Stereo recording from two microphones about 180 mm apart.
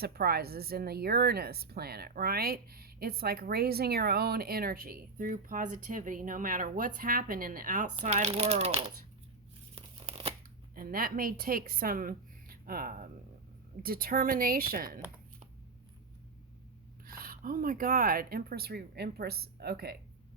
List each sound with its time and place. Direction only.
0.0 s speech: 60° right (ahead or behind); by 8.8 s 35° right (ahead or behind)
9.7 s crumpling: 30° right (ahead or behind)
10.8 s speech: 55° right (ahead or behind)
17.1 s speech: 55° right (ahead or behind)